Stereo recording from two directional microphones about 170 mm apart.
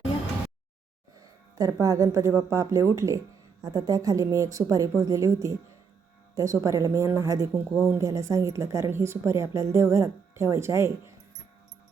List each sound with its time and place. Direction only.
1.5 s a woman's voice: 20° right (ahead or behind)